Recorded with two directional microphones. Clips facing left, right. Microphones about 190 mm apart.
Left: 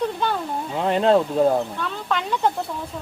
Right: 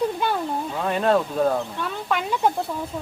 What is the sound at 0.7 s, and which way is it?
Speech, 20° left (ahead or behind).